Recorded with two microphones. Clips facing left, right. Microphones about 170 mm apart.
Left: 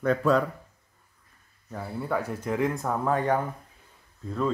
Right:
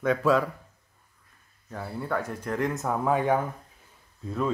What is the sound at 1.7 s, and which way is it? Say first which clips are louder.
Speech: left 1 dB; centre (ahead or behind).